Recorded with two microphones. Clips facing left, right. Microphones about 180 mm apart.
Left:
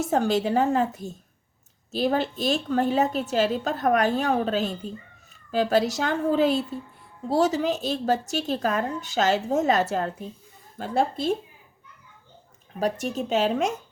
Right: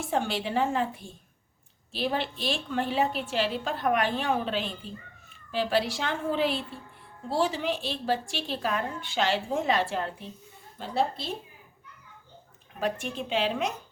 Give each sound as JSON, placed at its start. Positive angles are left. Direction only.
{"t": 0.0, "sound": "a woman's voice", "side_deg": 40}
{"t": 12.8, "sound": "a woman's voice", "side_deg": 40}